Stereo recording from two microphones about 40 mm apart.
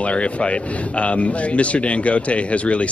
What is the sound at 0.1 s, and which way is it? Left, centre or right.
Speech, left.